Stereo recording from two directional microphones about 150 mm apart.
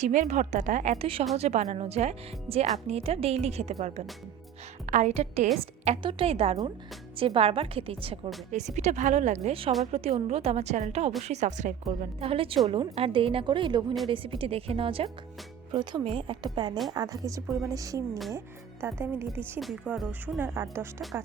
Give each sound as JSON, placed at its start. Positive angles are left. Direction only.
{"t": 0.0, "sound": "a woman's voice", "side_deg": -55}
{"t": 0.9, "sound": "a woman's voice", "side_deg": -35}
{"t": 1.4, "sound": "a woman's voice", "side_deg": -50}
{"t": 8.5, "sound": "a woman's voice", "side_deg": -50}
{"t": 12.2, "sound": "a woman's voice", "side_deg": -40}
{"t": 19.5, "sound": "speech", "side_deg": -5}